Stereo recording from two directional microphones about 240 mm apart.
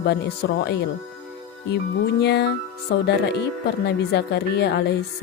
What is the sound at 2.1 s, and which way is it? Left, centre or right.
Speech, left.